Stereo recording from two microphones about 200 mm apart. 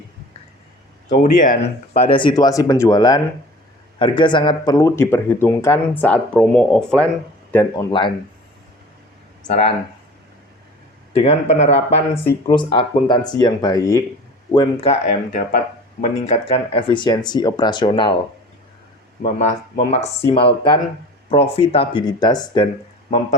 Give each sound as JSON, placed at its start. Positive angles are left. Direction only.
{"t": 1.2, "sound": "speech", "side_deg": 40}
{"t": 7.9, "sound": "speech", "side_deg": 25}
{"t": 9.5, "sound": "speech", "side_deg": 35}
{"t": 11.2, "sound": "speech", "side_deg": 30}
{"t": 14.8, "sound": "speech", "side_deg": 35}
{"t": 19.2, "sound": "speech", "side_deg": 40}